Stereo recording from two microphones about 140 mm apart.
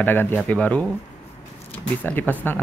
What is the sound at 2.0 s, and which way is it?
Speech, 10° left (ahead or behind).